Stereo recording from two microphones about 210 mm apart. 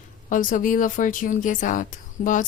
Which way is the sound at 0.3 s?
40° left (ahead or behind).